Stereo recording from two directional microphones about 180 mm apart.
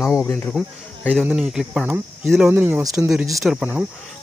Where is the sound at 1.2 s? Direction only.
5° right (ahead or behind).